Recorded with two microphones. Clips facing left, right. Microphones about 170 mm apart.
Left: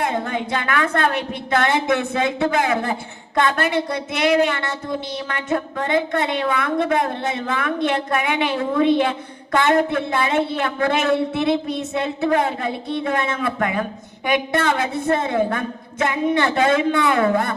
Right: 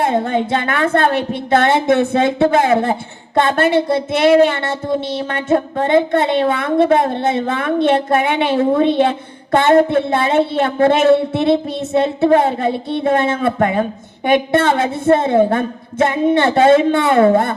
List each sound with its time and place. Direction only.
0.0 s a woman's voice: 30° right (ahead or behind)